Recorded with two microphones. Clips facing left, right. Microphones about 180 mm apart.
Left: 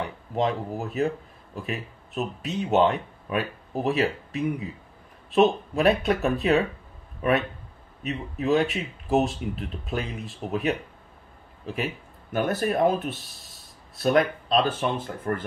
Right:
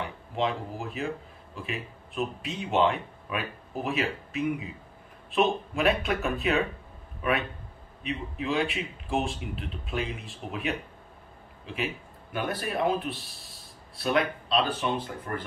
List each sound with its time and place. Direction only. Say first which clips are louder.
0.4 s speech: left 4 dB; 40° left (ahead or behind)